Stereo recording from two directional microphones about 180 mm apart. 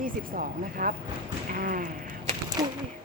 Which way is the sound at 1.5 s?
50° right (ahead or behind).